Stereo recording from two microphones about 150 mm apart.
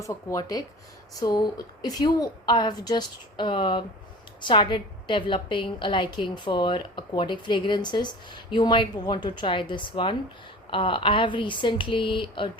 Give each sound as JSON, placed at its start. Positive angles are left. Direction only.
{"t": 0.0, "sound": "a woman's voice", "side_deg": 25}